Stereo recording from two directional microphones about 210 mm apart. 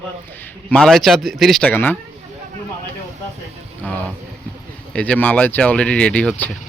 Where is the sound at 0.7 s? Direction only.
Centre (ahead or behind).